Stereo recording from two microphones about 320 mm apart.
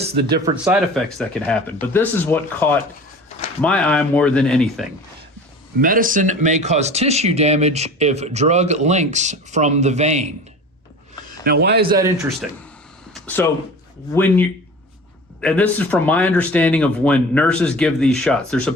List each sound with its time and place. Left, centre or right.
0.1 s speech: right
0.4 s speech: centre
5.8 s speech: right
11.4 s speech: right
11.9 s speech: centre
13.2 s speech: centre